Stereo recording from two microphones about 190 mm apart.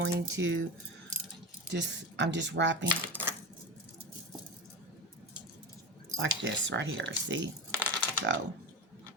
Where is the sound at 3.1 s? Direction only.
10° right (ahead or behind).